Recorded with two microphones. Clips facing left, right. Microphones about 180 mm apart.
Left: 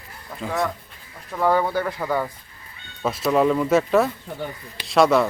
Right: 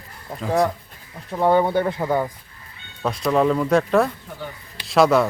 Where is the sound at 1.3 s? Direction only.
25° right (ahead or behind).